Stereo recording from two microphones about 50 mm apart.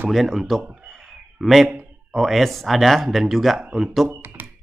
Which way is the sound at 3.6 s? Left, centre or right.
Centre.